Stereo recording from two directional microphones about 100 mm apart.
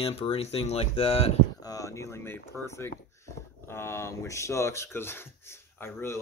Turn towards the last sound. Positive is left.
turn(degrees=25)  # may be behind; listen again after turning